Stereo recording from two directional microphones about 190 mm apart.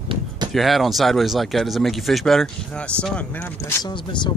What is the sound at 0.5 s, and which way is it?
Speech, centre (ahead or behind).